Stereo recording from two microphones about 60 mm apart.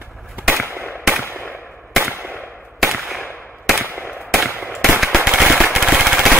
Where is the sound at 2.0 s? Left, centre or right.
Right.